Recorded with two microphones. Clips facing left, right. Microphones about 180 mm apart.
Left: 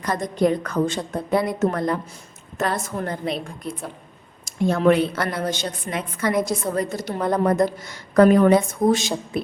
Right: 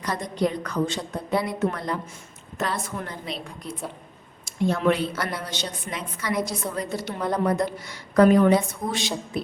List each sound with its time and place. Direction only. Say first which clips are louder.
0.0 s a woman's voice: left 4 dB; 50° left (ahead or behind)
4.4 s a woman's voice: left 4 dB; 45° left (ahead or behind)